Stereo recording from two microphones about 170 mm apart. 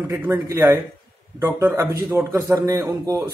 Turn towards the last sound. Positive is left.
turn(degrees=-20)  # may be behind; listen again after turning